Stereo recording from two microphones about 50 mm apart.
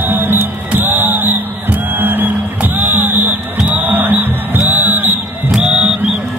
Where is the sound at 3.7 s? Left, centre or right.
Right.